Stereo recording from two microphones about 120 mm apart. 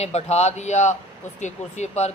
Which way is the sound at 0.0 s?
65° left (ahead or behind).